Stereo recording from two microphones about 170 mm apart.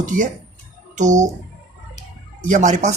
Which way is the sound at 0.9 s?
45° right (ahead or behind).